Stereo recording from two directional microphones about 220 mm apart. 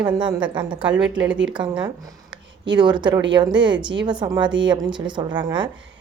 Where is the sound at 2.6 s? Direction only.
20° right (ahead or behind).